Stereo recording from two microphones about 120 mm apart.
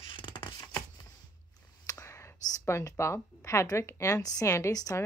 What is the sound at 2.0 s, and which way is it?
A woman's voice, 25° left (ahead or behind).